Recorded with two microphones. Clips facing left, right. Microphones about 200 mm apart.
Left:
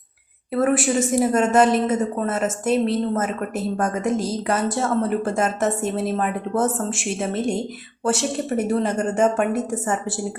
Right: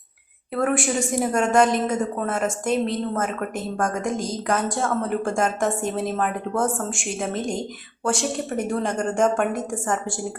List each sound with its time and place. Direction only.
0.5 s a woman's voice: 5° left (ahead or behind)